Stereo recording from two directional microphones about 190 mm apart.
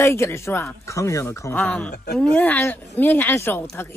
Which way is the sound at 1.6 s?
Centre (ahead or behind).